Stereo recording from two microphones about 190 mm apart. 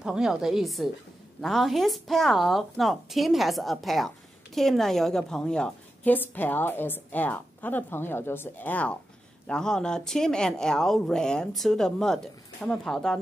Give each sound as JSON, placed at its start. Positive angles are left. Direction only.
{"t": 0.0, "sound": "a woman's voice", "side_deg": -5}